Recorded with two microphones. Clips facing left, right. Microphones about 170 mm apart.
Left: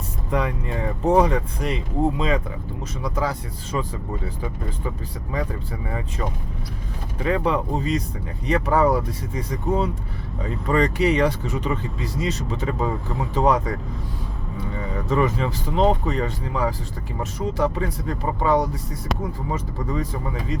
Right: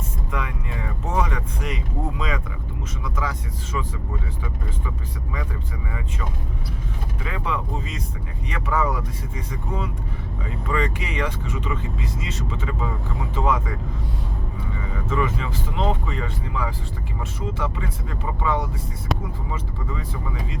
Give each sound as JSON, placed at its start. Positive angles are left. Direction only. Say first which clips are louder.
{"t": 0.3, "sound": "speech", "louder": "left 8 dB", "side_deg": 35}
{"t": 7.2, "sound": "speech", "louder": "left 8 dB", "side_deg": 40}
{"t": 15.1, "sound": "speech", "louder": "left 4 dB", "side_deg": 40}